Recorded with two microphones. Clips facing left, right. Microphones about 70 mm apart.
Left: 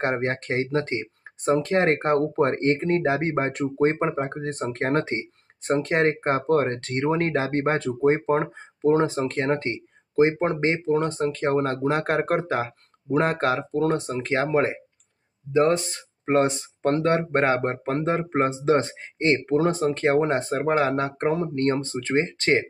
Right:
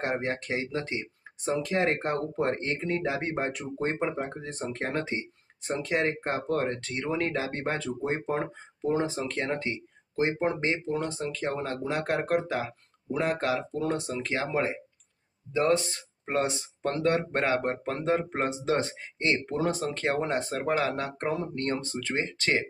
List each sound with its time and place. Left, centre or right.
0.0 s speech: left
15.5 s speech: left